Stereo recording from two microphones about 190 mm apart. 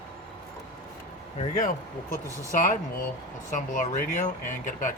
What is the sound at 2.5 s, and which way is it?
Speech, 45° left (ahead or behind).